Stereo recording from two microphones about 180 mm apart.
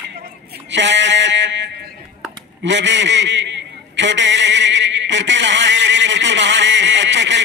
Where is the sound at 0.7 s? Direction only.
90° right.